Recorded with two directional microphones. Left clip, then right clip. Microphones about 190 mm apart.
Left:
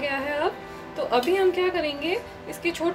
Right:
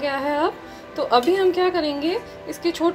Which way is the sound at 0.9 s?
15° right (ahead or behind).